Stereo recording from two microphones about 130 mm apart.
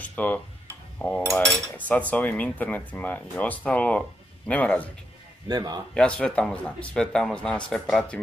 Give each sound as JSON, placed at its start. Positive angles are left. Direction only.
{"t": 0.0, "sound": "speech", "side_deg": 10}
{"t": 0.9, "sound": "cutlery", "side_deg": 10}
{"t": 5.5, "sound": "speech", "side_deg": -30}
{"t": 5.9, "sound": "cutlery", "side_deg": 5}